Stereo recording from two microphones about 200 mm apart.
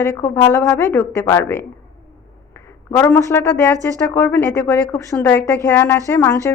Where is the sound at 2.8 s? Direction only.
10° left (ahead or behind).